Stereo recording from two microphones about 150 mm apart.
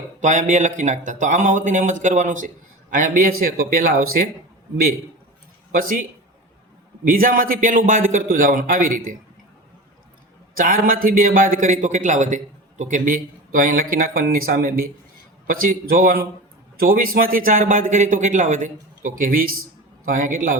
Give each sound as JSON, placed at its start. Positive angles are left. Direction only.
{"t": 0.2, "sound": "speech", "side_deg": -55}
{"t": 2.9, "sound": "speech", "side_deg": -70}
{"t": 5.7, "sound": "speech", "side_deg": -65}
{"t": 10.6, "sound": "speech", "side_deg": -70}